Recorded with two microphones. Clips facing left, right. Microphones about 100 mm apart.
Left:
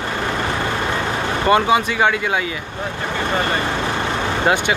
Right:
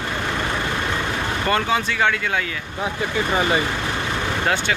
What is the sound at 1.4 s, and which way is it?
Speech, 10° left (ahead or behind).